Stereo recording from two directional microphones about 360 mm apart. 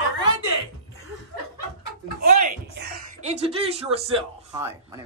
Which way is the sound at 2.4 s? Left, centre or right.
Right.